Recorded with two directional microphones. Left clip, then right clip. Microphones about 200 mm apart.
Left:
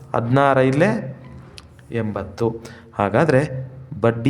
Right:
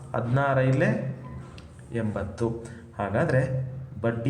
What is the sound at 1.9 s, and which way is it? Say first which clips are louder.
A man's voice: left 6 dB; 35° left (ahead or behind).